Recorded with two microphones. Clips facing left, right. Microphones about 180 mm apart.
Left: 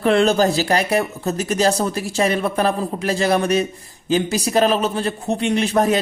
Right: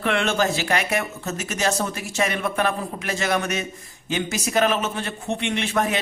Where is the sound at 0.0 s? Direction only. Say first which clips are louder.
Left 7 dB; 35° left (ahead or behind).